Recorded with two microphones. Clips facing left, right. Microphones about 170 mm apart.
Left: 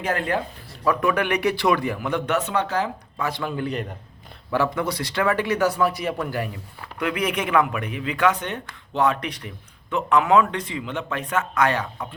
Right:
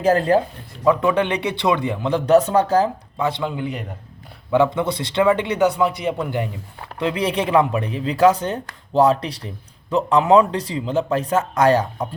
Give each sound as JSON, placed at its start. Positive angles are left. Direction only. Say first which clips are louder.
{"t": 0.0, "sound": "speech", "louder": "right 8 dB", "side_deg": -35}
{"t": 3.2, "sound": "speech", "louder": "right 4 dB", "side_deg": -25}